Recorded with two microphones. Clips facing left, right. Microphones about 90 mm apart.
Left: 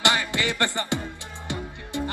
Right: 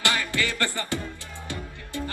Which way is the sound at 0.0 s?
20° left (ahead or behind).